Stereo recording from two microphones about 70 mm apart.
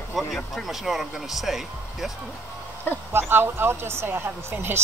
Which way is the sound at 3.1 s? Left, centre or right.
Right.